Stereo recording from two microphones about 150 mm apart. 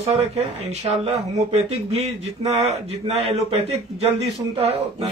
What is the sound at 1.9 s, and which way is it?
A man's voice, 45° right (ahead or behind).